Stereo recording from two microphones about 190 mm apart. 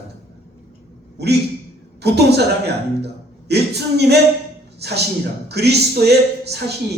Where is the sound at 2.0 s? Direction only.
60° right (ahead or behind).